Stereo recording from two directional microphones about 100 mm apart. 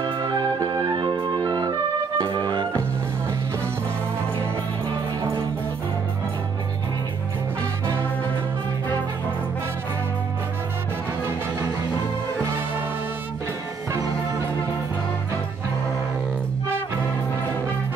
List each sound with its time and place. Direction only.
0.2 s music: 40° right (ahead or behind)